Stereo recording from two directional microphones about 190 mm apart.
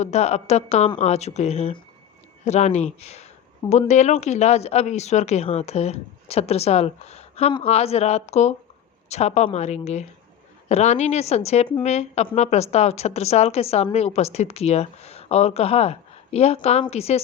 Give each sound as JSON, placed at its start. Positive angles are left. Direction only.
{"t": 0.0, "sound": "a woman's voice", "side_deg": 35}